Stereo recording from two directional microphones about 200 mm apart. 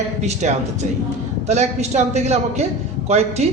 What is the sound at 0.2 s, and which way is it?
A man's voice, 35° right (ahead or behind).